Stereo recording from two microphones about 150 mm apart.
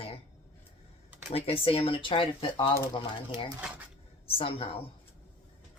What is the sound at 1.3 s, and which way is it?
Speech, 40° left (ahead or behind).